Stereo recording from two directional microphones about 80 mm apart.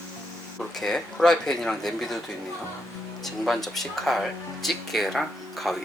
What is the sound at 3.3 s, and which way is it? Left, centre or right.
Speech, centre.